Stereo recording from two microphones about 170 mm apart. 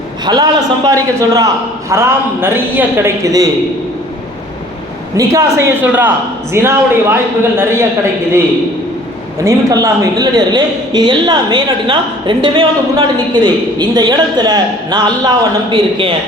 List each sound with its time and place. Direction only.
0.3 s a woman's voice: 20° right (ahead or behind)
5.1 s a man's voice: 20° right (ahead or behind)
9.4 s a woman's voice: 20° right (ahead or behind)